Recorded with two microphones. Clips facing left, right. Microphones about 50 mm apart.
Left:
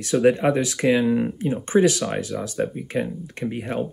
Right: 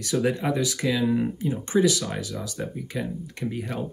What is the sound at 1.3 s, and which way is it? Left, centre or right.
Speech, left.